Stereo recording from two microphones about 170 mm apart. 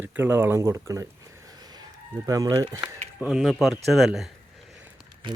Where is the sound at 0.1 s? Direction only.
10° right (ahead or behind).